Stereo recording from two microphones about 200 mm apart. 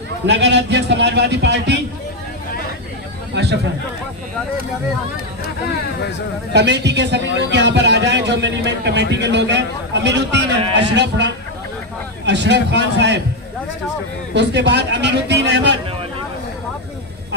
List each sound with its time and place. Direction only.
0.3 s a man's voice: 60° right (ahead or behind)
3.3 s a man's voice: 55° right (ahead or behind)
6.5 s a man's voice: 60° right (ahead or behind)
14.3 s a man's voice: 60° right (ahead or behind)